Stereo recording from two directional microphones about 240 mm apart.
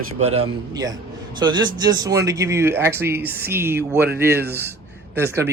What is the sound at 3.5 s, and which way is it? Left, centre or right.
Speech, centre.